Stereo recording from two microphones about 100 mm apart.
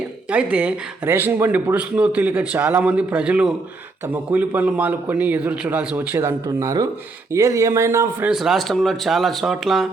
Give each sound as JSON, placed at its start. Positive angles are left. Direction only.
{"t": 0.3, "sound": "speech", "side_deg": -10}
{"t": 8.3, "sound": "speech", "side_deg": 0}